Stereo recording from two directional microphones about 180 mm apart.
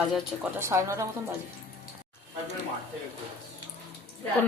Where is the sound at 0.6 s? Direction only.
15° right (ahead or behind).